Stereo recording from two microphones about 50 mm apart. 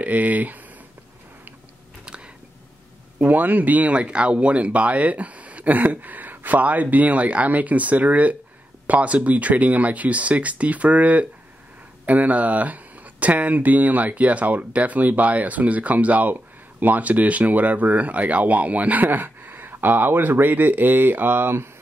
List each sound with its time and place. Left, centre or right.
0.0 s speech: right
2.0 s a sound: centre
3.2 s speech: right